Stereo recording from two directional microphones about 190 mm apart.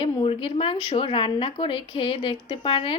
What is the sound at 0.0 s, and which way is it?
Speech, 25° left (ahead or behind).